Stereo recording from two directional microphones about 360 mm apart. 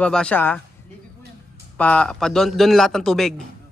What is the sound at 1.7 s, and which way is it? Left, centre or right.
A man's voice, centre.